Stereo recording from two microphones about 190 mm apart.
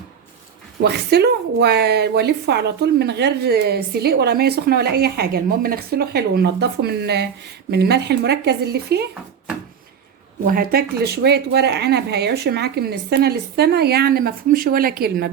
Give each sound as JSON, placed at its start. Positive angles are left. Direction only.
{"t": 0.8, "sound": "a woman's voice", "side_deg": -60}
{"t": 10.4, "sound": "a woman's voice", "side_deg": -50}